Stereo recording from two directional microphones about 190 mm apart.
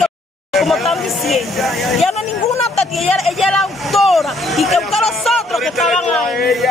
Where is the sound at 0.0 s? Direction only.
Centre (ahead or behind).